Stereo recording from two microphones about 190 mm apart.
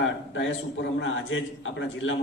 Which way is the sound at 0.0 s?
75° left (ahead or behind).